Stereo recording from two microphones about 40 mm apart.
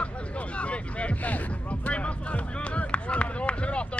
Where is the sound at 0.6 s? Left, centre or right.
Left.